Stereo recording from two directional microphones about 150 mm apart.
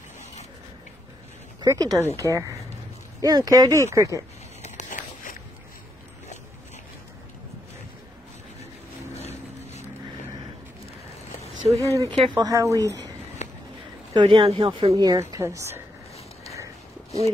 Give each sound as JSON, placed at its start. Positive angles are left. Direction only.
{"t": 1.6, "sound": "a woman's voice", "side_deg": -25}
{"t": 4.6, "sound": "a sound", "side_deg": 50}
{"t": 9.1, "sound": "boat", "side_deg": 45}
{"t": 11.7, "sound": "a woman's voice", "side_deg": -20}
{"t": 13.4, "sound": "a sound", "side_deg": 50}
{"t": 14.1, "sound": "a woman's voice", "side_deg": -35}